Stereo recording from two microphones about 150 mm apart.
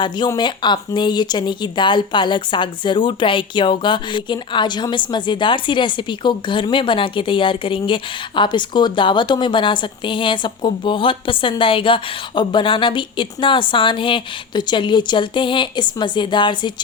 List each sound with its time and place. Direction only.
0.3 s speech: 30° left (ahead or behind)